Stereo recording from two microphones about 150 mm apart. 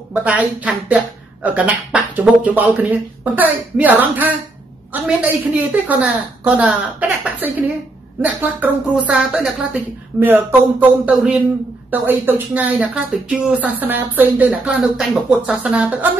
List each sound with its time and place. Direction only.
0.1 s speech: 10° right (ahead or behind)